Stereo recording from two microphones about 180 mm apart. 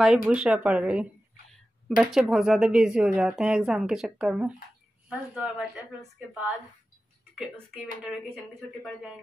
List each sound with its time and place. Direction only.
0.0 s speech: 5° right (ahead or behind)
8.5 s speech: centre (ahead or behind)